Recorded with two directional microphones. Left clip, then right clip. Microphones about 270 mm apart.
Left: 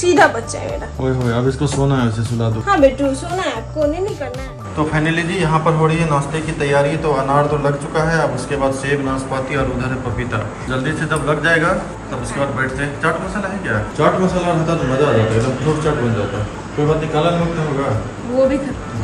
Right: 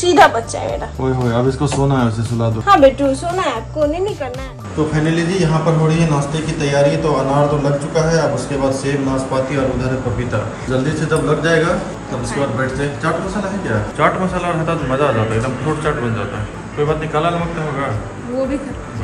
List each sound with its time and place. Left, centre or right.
0.0 s a man's voice: centre
1.3 s speech: centre
2.6 s a man's voice: centre
4.9 s a man's voice: centre
10.7 s a man's voice: centre
17.1 s a man's voice: centre
18.4 s a man's voice: centre